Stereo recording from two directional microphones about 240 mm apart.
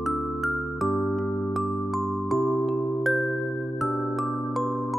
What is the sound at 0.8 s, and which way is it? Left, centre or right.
Music, centre.